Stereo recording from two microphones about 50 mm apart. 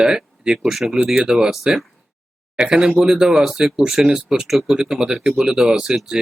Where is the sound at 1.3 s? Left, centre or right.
Centre.